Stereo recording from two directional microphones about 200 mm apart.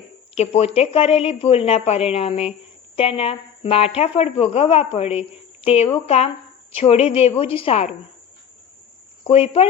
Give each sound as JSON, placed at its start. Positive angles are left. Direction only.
{"t": 0.3, "sound": "speech", "side_deg": 30}
{"t": 9.2, "sound": "speech", "side_deg": 30}